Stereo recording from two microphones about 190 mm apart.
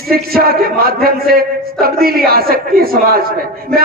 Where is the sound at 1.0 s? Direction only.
50° right (ahead or behind).